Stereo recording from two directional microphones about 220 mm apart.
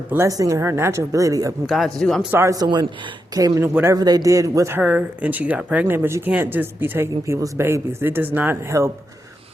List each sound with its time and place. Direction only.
0.1 s a man's voice: 15° right (ahead or behind)
1.6 s speech: centre (ahead or behind)
2.3 s a man's voice: 15° right (ahead or behind)